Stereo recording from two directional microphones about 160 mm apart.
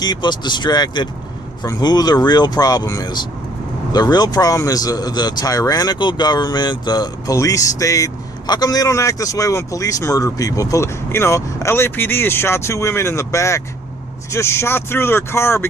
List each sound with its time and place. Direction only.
0.0 s speech: 25° left (ahead or behind)